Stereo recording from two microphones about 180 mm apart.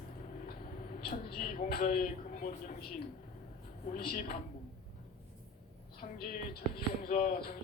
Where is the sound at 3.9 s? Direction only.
55° left (ahead or behind).